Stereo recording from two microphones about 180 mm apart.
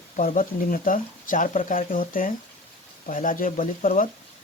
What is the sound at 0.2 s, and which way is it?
Speech, 50° left (ahead or behind).